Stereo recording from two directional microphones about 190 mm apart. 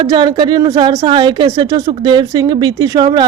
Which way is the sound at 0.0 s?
25° right (ahead or behind).